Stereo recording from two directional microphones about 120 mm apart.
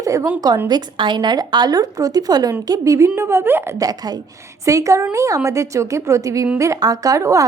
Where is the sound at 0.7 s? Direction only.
40° right (ahead or behind).